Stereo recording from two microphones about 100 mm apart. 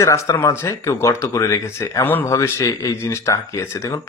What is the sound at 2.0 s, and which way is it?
Speech, 20° left (ahead or behind).